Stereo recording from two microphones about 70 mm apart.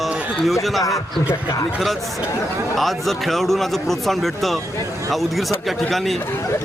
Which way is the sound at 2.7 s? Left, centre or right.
Centre.